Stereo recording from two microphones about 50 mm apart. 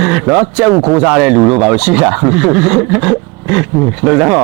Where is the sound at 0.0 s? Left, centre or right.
Centre.